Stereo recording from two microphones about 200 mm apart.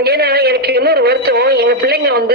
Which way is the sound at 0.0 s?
50° right (ahead or behind).